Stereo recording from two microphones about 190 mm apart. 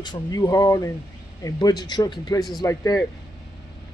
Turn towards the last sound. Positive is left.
turn(degrees=20)  # may be behind; listen again after turning